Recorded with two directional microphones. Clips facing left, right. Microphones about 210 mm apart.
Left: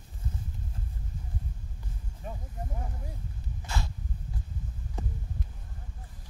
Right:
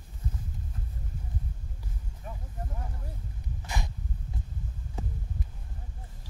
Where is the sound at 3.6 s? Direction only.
15° right (ahead or behind).